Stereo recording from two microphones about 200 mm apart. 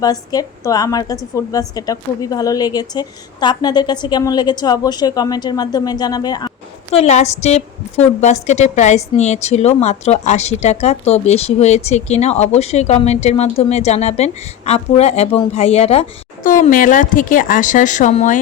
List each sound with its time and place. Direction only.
0.0 s a woman's voice: 20° left (ahead or behind)
6.9 s speech: 35° left (ahead or behind)